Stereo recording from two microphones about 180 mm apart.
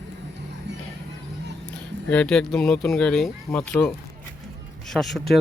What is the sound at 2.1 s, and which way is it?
Speech, 5° left (ahead or behind).